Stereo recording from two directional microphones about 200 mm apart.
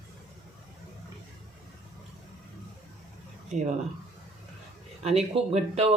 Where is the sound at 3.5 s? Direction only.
35° right (ahead or behind).